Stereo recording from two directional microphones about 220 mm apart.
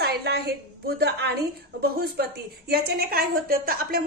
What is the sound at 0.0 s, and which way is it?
A woman's voice, 45° right (ahead or behind).